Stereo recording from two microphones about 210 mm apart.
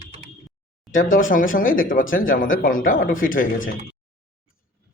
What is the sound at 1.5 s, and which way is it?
Speech, 40° left (ahead or behind).